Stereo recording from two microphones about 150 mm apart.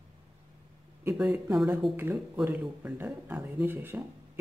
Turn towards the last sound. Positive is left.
turn(degrees=-15)  # may be behind; listen again after turning